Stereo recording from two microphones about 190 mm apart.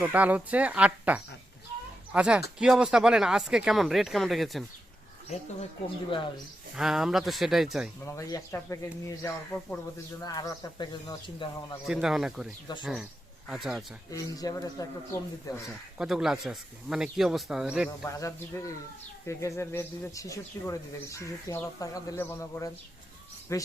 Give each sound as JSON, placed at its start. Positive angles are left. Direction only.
{"t": 0.0, "sound": "speech", "side_deg": -10}
{"t": 6.1, "sound": "speech", "side_deg": 25}
{"t": 6.7, "sound": "speech", "side_deg": 0}
{"t": 8.0, "sound": "speech", "side_deg": 15}
{"t": 11.9, "sound": "speech", "side_deg": 0}
{"t": 14.1, "sound": "speech", "side_deg": 20}
{"t": 16.0, "sound": "speech", "side_deg": 0}
{"t": 18.0, "sound": "speech", "side_deg": 15}